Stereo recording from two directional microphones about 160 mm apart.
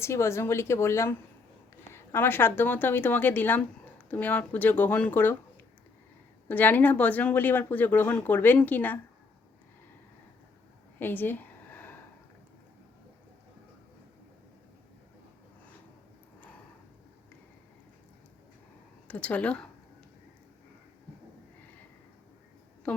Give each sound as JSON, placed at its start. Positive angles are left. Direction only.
{"t": 0.0, "sound": "speech", "side_deg": 15}
{"t": 6.5, "sound": "speech", "side_deg": 10}
{"t": 11.0, "sound": "a sound", "side_deg": 10}
{"t": 19.0, "sound": "speech", "side_deg": 10}